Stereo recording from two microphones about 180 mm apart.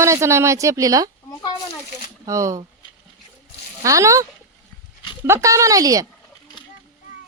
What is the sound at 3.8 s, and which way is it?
Speech, 15° right (ahead or behind).